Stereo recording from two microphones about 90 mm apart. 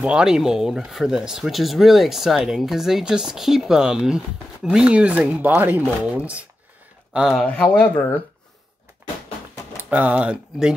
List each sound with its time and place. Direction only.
0.0 s speech: 10° right (ahead or behind)
7.4 s speech: 15° left (ahead or behind)
9.8 s speech: 20° right (ahead or behind)